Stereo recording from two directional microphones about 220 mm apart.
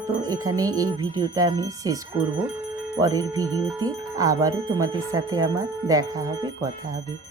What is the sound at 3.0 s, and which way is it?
Music, 15° right (ahead or behind).